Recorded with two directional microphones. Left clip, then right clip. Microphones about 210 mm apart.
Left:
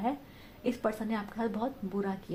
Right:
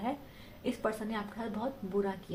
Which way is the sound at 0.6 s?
40° left (ahead or behind).